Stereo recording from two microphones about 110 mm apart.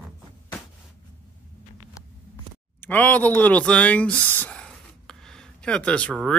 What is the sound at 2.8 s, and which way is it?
Speech, 15° left (ahead or behind).